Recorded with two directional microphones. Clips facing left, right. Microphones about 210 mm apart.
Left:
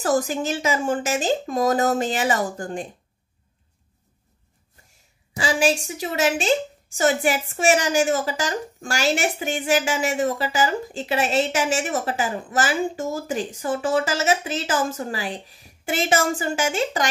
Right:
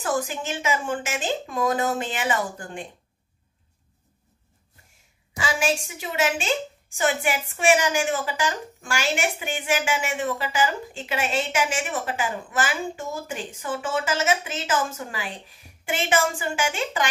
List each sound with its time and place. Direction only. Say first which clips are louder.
0.0 s a woman's voice: left 5 dB; 40° left (ahead or behind)
5.4 s a woman's voice: left 4 dB; 35° left (ahead or behind)